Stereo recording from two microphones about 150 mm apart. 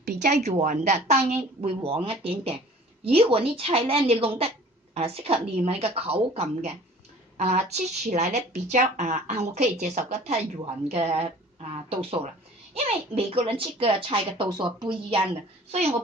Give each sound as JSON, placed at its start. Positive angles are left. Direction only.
{"t": 0.0, "sound": "a woman's voice", "side_deg": -55}